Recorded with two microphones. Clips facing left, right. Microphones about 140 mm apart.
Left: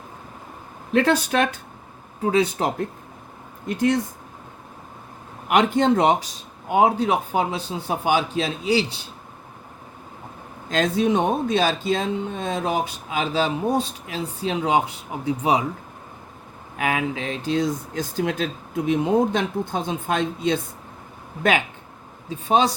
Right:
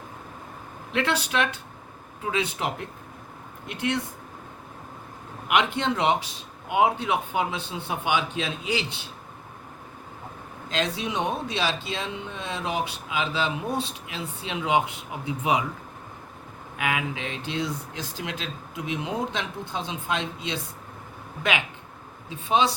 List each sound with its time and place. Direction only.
0.9 s speech: 45° left (ahead or behind)
5.5 s speech: 40° left (ahead or behind)
10.7 s speech: 45° left (ahead or behind)
16.7 s speech: 35° left (ahead or behind)
22.3 s speech: 40° left (ahead or behind)